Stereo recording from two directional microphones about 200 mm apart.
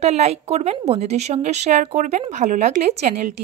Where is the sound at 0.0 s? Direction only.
35° right (ahead or behind).